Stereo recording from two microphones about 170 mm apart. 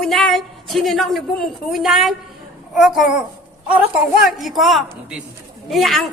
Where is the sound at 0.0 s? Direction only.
Centre (ahead or behind).